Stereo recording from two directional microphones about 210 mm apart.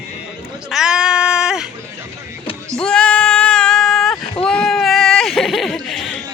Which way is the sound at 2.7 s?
5° left (ahead or behind).